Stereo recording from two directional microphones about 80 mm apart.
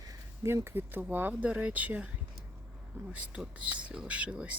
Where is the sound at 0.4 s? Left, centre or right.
Right.